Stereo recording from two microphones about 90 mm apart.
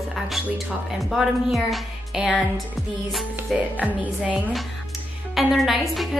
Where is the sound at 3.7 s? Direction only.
15° right (ahead or behind).